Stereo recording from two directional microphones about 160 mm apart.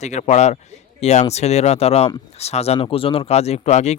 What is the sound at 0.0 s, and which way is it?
Speech, 45° left (ahead or behind).